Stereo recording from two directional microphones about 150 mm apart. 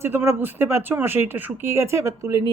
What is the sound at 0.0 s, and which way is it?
A woman's voice, 15° right (ahead or behind).